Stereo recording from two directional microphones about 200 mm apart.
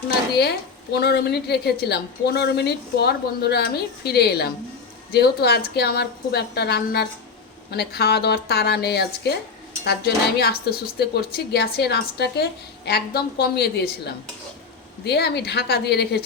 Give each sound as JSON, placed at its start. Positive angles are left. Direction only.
{"t": 0.9, "sound": "a woman's voice", "side_deg": 55}